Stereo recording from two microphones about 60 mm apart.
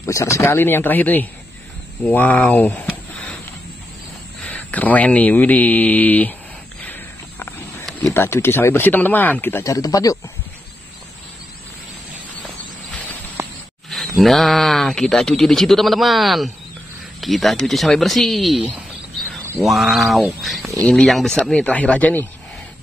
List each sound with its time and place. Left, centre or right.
0.0 s speech: left
0.6 s speech: left
2.1 s a sound: left
4.4 s speech: left
6.8 s walk: left
8.1 s speech: left
9.6 s speech: left
13.8 s speech: centre
21.7 s speech: left